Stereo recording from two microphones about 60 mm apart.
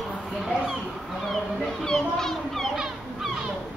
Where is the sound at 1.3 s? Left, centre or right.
Centre.